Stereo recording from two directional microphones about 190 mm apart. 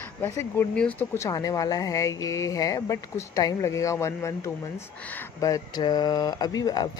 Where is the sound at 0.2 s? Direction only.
10° left (ahead or behind).